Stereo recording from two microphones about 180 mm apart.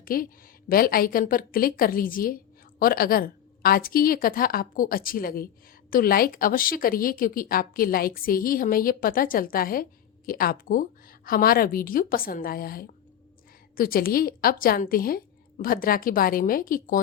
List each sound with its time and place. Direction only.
0.0 s a woman's voice: 50° left (ahead or behind)